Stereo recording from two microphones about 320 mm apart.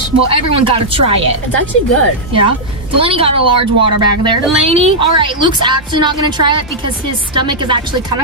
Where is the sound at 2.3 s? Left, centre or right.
Centre.